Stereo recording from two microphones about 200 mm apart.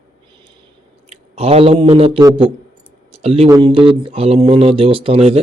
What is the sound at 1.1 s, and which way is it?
A man's voice, 30° right (ahead or behind).